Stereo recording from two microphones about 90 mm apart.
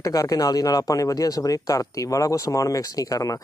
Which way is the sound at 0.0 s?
40° left (ahead or behind).